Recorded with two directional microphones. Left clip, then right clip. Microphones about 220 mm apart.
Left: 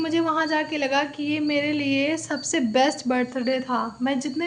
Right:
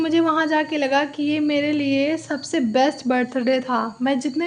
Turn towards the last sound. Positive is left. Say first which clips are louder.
# right 4 dB
turn(degrees=-20)  # may be behind; listen again after turning